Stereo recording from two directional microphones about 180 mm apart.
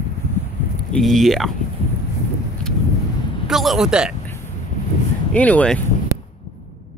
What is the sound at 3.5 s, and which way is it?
Speech, centre (ahead or behind).